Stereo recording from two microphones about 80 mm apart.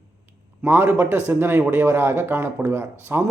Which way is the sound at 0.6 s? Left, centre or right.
Right.